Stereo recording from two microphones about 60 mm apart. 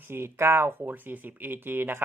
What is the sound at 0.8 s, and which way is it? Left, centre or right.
Speech, right.